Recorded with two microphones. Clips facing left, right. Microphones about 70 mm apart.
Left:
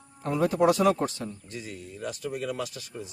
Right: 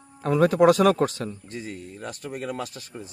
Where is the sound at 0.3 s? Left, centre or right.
Right.